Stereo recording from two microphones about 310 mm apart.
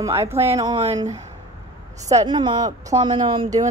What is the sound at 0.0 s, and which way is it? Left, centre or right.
Speech, centre.